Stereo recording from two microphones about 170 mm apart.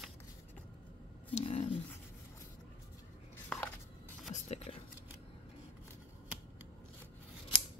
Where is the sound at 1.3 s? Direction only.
40° left (ahead or behind).